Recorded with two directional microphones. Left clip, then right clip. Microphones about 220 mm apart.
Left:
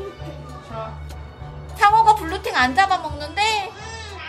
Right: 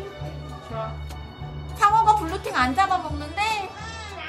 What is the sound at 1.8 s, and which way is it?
A child's voice, 10° left (ahead or behind).